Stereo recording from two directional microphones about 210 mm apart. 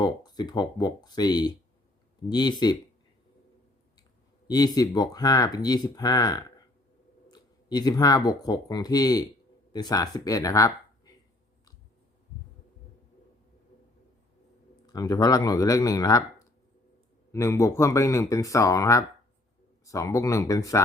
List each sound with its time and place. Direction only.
0.0 s speech: 20° left (ahead or behind)
4.4 s speech: 20° left (ahead or behind)
14.8 s speech: 15° left (ahead or behind)